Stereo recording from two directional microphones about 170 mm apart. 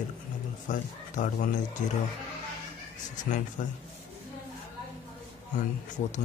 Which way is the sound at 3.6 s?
50° left (ahead or behind).